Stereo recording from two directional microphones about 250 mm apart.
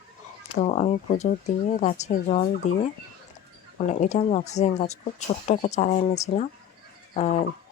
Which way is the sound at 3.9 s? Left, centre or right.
Left.